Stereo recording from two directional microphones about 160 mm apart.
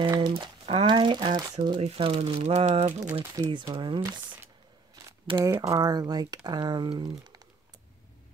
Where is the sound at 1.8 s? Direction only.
40° right (ahead or behind).